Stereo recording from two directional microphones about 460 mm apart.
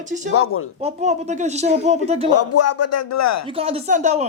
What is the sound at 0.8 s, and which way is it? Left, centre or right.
Speech, centre.